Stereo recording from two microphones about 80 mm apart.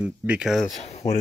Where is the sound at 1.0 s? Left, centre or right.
Left.